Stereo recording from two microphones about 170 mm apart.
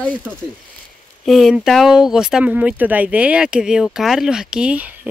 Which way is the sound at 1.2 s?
Centre (ahead or behind).